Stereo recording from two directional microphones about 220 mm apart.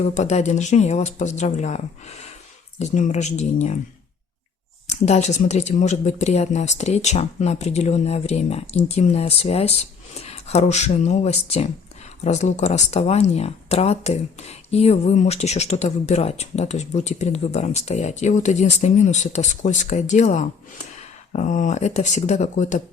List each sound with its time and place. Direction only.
0.0 s speech: 30° left (ahead or behind)
4.9 s speech: 30° left (ahead or behind)